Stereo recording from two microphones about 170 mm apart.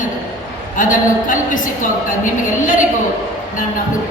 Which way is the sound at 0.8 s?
50° left (ahead or behind).